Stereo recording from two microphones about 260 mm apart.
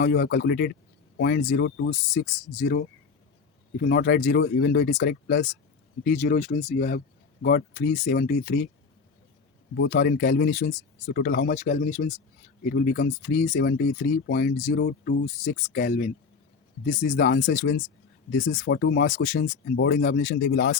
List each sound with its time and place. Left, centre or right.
0.0 s speech: left
9.7 s speech: left